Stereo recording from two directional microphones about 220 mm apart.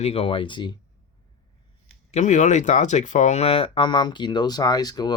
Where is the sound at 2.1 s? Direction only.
35° left (ahead or behind).